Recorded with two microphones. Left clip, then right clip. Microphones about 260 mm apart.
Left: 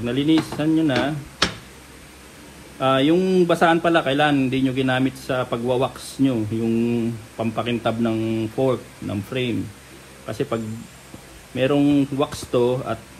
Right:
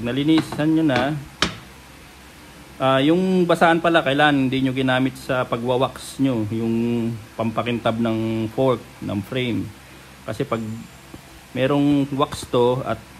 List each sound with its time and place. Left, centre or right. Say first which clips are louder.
0.0 s a man's voice: even; right
2.8 s a man's voice: even; right